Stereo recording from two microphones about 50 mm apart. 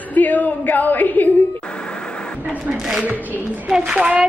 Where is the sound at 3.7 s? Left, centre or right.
Centre.